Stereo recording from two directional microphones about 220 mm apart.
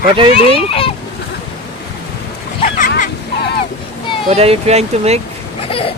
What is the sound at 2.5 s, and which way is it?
Goose, 35° left (ahead or behind).